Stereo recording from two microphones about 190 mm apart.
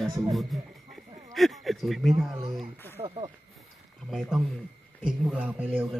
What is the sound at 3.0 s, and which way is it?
Speech, 30° right (ahead or behind).